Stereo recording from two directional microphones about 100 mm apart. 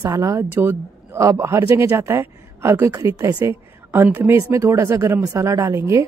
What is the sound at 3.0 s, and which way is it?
Speech, 35° right (ahead or behind).